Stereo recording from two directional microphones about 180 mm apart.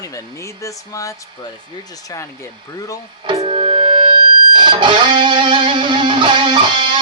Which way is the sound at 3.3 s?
25° right (ahead or behind).